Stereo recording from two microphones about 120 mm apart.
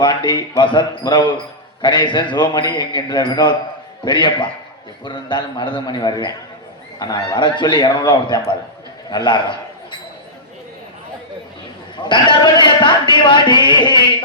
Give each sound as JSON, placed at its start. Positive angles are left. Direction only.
{"t": 0.0, "sound": "a man's voice", "side_deg": 40}
{"t": 11.9, "sound": "a man's voice", "side_deg": 40}